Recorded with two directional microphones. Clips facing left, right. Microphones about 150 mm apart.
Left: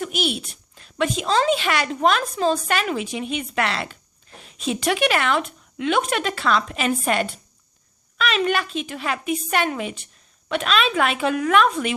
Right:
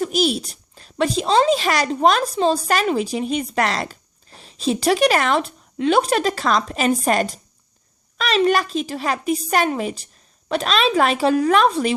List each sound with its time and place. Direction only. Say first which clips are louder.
0.0 s a woman's voice: right 5 dB; 35° right (ahead or behind)